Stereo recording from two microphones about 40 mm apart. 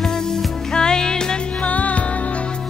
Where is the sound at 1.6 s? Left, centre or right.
Left.